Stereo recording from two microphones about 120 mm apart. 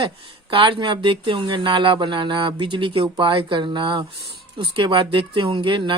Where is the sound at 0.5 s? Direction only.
45° right (ahead or behind).